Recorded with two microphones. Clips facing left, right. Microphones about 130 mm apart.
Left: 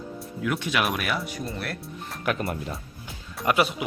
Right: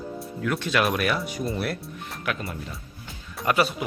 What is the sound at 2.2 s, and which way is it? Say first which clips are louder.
Speech: left 4 dB; 45° left (ahead or behind).